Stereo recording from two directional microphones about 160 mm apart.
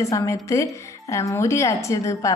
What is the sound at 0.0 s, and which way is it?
A woman's voice, 20° left (ahead or behind).